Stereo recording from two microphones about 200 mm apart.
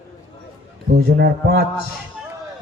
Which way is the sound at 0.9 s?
55° right (ahead or behind).